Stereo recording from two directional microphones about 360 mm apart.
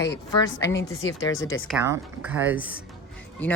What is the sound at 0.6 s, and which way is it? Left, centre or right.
Speech, left.